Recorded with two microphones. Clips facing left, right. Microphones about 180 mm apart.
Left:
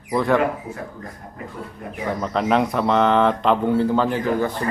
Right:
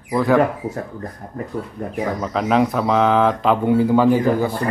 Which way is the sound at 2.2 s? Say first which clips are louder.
Right 1 dB; centre (ahead or behind).